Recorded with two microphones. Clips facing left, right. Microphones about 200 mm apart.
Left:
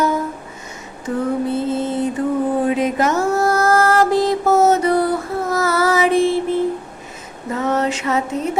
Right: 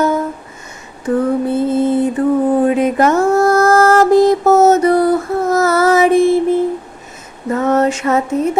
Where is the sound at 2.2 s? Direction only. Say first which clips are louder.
Right 5 dB; 55° right (ahead or behind).